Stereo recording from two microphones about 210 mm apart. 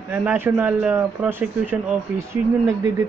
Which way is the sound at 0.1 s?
10° right (ahead or behind).